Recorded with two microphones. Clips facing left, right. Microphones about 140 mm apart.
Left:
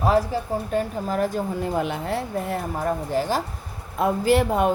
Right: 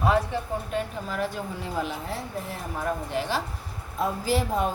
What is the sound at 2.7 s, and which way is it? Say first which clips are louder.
Speech: left 3 dB; 40° left (ahead or behind).